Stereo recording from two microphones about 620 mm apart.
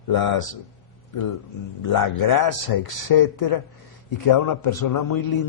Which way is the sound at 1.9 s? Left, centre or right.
Left.